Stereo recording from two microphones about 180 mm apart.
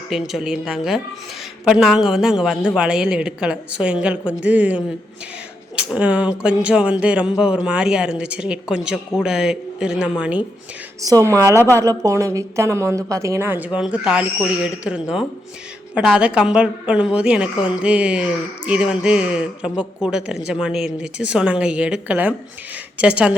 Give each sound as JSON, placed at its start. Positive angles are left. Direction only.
{"t": 0.1, "sound": "a woman's voice", "side_deg": 0}
{"t": 11.0, "sound": "a woman's voice", "side_deg": -20}